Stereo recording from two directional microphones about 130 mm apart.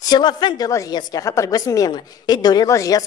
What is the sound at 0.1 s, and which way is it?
A woman's voice, 35° left (ahead or behind).